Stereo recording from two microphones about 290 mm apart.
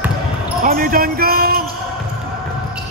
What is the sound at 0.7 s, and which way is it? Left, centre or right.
Speech, right.